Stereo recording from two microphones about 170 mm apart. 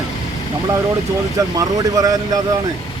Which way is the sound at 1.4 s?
20° right (ahead or behind).